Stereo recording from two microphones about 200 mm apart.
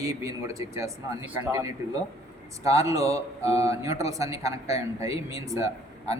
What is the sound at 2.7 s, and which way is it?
A man's voice, 15° right (ahead or behind).